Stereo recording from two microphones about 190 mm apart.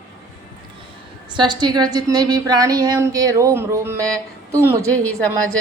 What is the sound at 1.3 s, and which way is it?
A woman's voice, 25° right (ahead or behind).